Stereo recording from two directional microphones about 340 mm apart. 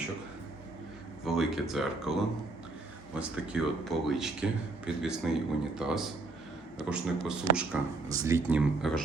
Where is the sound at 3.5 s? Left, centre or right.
Centre.